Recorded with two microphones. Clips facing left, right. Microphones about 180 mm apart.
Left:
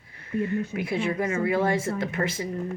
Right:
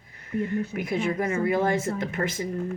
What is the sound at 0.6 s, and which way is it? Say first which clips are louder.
Speech: even; 30° left (ahead or behind).